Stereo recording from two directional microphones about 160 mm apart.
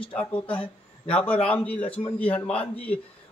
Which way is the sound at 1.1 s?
10° left (ahead or behind).